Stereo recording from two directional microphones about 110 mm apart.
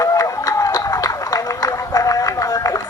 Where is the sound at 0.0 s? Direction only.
30° left (ahead or behind).